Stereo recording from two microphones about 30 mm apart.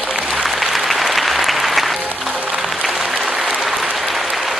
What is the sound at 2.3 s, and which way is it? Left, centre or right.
Music, right.